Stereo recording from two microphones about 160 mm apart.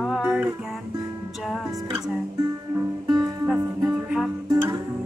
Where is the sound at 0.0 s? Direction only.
Centre (ahead or behind).